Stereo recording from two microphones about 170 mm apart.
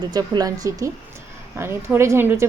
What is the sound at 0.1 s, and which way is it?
A woman's voice, 25° right (ahead or behind).